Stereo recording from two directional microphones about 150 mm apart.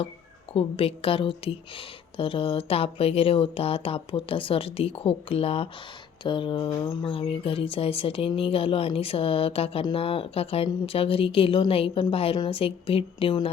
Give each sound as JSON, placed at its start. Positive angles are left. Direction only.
{"t": 0.5, "sound": "a woman's voice", "side_deg": 40}